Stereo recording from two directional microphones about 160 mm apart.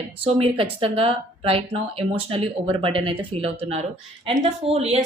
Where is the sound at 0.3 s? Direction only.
40° right (ahead or behind).